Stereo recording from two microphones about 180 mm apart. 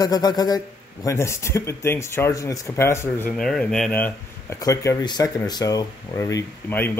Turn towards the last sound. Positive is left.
turn(degrees=10)  # may be behind; listen again after turning